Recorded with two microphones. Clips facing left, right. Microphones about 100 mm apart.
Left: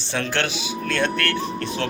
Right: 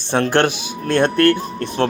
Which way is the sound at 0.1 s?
50° right (ahead or behind).